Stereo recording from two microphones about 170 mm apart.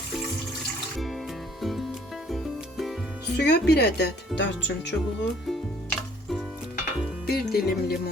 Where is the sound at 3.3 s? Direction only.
80° left.